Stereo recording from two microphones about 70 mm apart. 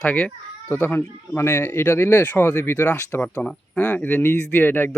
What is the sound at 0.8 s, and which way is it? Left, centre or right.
Speech, left.